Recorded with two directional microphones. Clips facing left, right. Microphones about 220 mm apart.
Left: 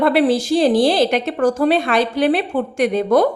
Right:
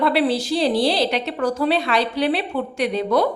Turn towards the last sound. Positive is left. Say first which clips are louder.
# left 5 dB
turn(degrees=50)  # may be behind; listen again after turning